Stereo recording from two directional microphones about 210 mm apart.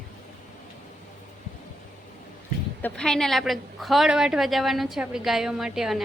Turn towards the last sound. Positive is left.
turn(degrees=0)  # may be behind; listen again after turning